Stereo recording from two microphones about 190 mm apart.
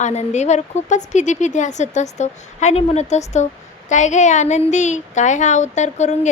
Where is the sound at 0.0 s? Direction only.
35° left (ahead or behind).